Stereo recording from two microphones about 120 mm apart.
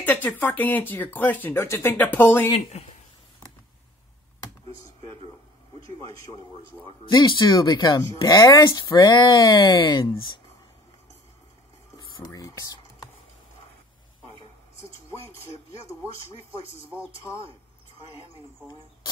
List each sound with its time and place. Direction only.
0.0 s speech: 15° left (ahead or behind)
2.5 s speech: 60° left (ahead or behind)
7.1 s speech: 40° left (ahead or behind)
12.2 s speech: 30° left (ahead or behind)
15.4 s speech: 50° right (ahead or behind)